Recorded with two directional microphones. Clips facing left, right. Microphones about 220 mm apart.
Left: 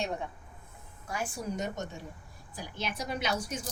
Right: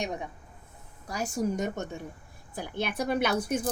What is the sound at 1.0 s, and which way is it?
A woman's voice, 40° right (ahead or behind).